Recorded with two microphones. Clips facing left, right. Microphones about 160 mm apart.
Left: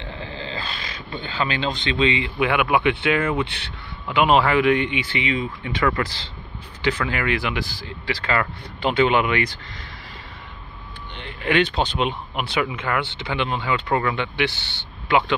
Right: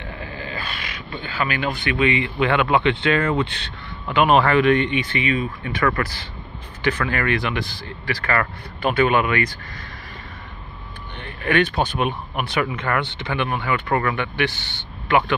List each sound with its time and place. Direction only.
0.0 s speech: 25° left (ahead or behind)
11.1 s speech: 20° left (ahead or behind)
14.5 s a man's voice: 15° right (ahead or behind)
15.0 s speech: 15° left (ahead or behind)